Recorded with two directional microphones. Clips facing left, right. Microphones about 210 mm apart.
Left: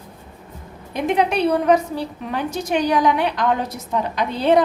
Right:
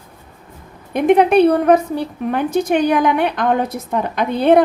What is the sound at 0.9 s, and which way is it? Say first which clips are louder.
A woman's voice: right 8 dB; 55° right (ahead or behind).